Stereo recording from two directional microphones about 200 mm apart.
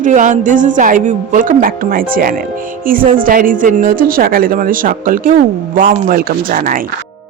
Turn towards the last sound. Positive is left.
turn(degrees=-45)  # may be behind; listen again after turning